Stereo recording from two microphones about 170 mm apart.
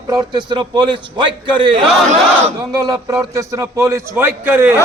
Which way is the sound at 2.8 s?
20° right (ahead or behind).